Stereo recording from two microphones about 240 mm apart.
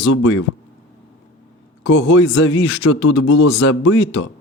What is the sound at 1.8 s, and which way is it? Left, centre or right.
Speech, left.